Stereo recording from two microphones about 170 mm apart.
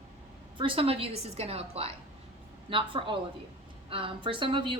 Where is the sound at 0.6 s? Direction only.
30° right (ahead or behind).